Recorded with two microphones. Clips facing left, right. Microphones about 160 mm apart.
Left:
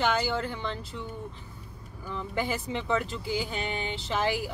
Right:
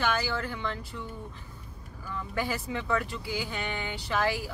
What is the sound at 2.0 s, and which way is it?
Speech, 20° left (ahead or behind).